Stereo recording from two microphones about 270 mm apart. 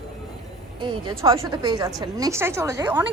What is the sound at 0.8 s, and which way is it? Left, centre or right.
A woman's voice, centre.